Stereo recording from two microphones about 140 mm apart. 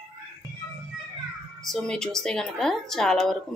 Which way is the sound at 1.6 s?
5° left (ahead or behind).